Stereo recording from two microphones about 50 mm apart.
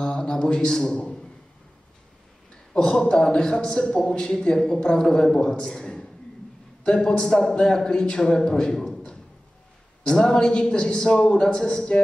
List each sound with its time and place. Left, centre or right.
0.0 s a man's voice: centre
2.7 s a man's voice: centre
10.0 s a man's voice: centre